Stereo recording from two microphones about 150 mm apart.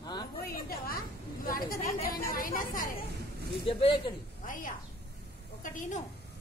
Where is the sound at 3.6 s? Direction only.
35° left (ahead or behind).